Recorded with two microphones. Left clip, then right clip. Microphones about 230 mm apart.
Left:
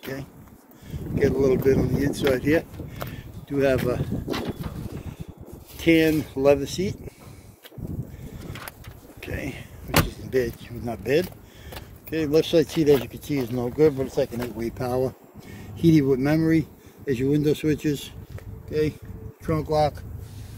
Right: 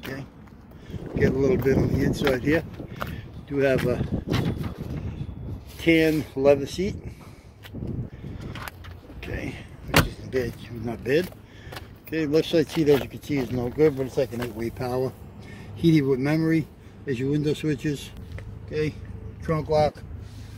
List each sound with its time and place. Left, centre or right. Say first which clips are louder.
0.0 s a sound: left 1 dB; centre
0.8 s speech: left 1 dB; centre
3.4 s speech: even; centre
5.8 s speech: left 1 dB; centre
9.2 s bird: left 1 dB; centre
10.0 s speech: left 3 dB; centre
19.4 s speech: even; centre